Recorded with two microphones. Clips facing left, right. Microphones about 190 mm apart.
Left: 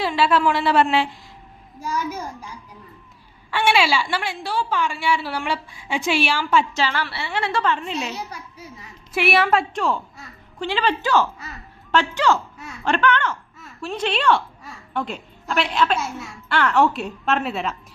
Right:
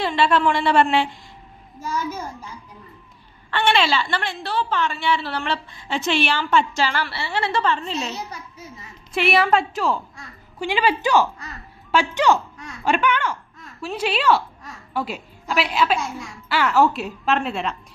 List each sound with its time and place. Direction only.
0.0 s a woman's voice: 5° left (ahead or behind)
3.5 s a woman's voice: 10° left (ahead or behind)
10.7 s a woman's voice: 15° right (ahead or behind); by 17.7 s centre (ahead or behind)